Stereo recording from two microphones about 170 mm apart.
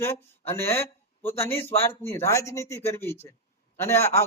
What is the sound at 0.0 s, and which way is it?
Speech, 15° left (ahead or behind).